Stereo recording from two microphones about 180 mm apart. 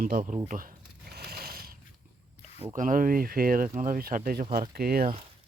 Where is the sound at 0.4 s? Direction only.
50° right (ahead or behind).